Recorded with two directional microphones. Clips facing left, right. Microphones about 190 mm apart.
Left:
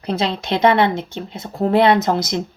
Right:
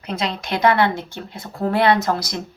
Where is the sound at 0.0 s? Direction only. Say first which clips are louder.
Left 4 dB; 30° left (ahead or behind).